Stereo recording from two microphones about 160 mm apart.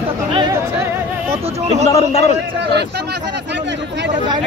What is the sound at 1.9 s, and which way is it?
Speech, 40° left (ahead or behind).